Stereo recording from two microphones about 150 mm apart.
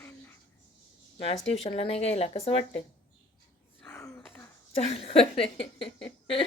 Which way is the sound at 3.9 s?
20° left (ahead or behind).